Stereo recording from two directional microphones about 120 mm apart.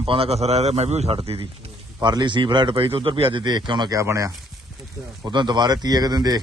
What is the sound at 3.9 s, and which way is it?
Speech, 25° right (ahead or behind).